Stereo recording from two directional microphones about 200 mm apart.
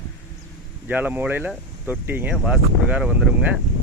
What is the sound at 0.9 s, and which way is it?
Speech, 10° right (ahead or behind).